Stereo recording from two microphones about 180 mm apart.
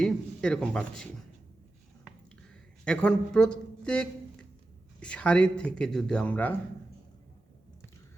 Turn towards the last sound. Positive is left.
turn(degrees=10)  # may be behind; listen again after turning